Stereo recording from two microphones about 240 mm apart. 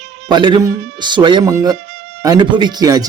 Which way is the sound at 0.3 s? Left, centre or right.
Centre.